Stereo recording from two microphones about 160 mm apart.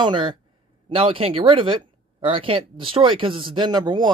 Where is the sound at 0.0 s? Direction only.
30° right (ahead or behind).